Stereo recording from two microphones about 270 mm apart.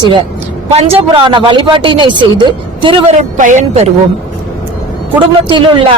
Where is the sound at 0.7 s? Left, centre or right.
Right.